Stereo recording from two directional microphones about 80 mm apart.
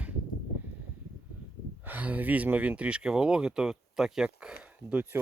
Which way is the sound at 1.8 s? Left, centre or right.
Right.